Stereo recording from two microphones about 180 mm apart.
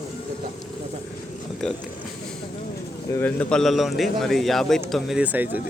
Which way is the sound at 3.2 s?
5° left (ahead or behind).